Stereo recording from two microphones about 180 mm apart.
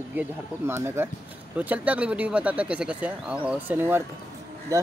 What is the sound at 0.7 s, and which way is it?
Speech, 15° right (ahead or behind).